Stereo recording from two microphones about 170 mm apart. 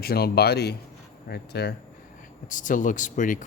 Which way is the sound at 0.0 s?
65° left (ahead or behind).